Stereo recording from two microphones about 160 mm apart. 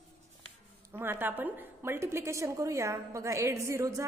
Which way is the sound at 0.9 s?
15° right (ahead or behind).